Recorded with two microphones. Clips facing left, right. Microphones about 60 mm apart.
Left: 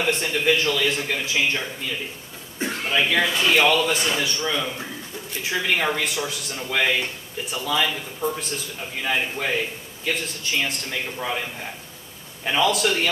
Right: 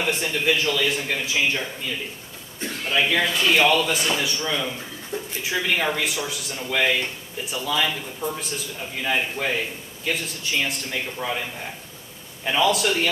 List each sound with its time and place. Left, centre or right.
0.0 s speech: centre
2.6 s throat clearing: left
2.9 s speech: centre
12.4 s speech: centre